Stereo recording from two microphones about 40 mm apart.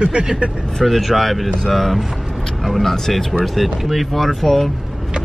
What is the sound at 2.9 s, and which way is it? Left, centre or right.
Speech, centre.